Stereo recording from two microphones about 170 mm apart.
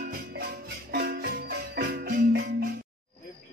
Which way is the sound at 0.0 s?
70° right (ahead or behind).